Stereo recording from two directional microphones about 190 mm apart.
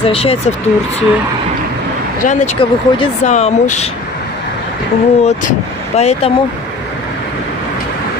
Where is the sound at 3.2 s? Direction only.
40° left (ahead or behind).